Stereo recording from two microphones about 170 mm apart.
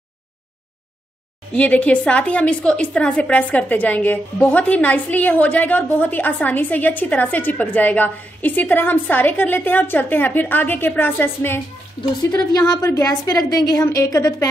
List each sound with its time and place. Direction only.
1.5 s a woman's voice: 10° left (ahead or behind)